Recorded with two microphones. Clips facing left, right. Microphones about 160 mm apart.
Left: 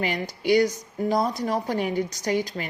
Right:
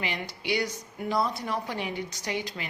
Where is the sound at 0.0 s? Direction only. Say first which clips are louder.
Left 7 dB; 45° left (ahead or behind).